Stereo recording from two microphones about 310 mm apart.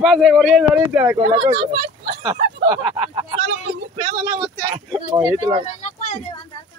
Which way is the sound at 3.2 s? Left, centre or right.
Centre.